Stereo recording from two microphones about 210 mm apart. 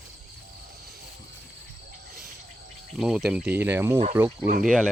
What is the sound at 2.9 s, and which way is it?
Speech, centre (ahead or behind).